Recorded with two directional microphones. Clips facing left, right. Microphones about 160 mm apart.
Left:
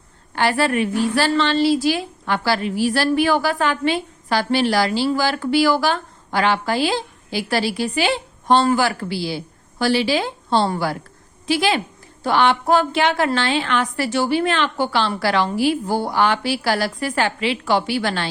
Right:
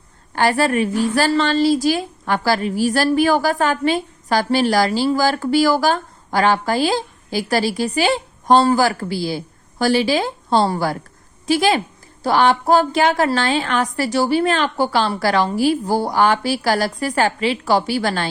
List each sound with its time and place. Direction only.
0.3 s a woman's voice: 40° right (ahead or behind)